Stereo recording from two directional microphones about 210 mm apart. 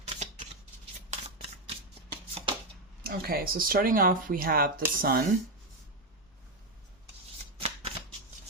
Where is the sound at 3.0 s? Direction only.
45° right (ahead or behind).